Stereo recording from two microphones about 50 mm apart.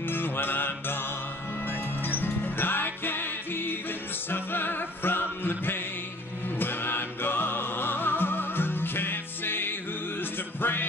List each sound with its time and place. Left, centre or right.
0.0 s music: left
2.0 s music: left